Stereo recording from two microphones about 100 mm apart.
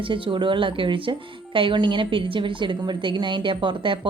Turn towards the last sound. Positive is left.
turn(degrees=-55)  # may be behind; listen again after turning